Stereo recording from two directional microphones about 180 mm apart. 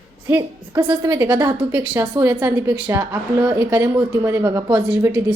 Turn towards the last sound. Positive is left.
turn(degrees=-15)  # may be behind; listen again after turning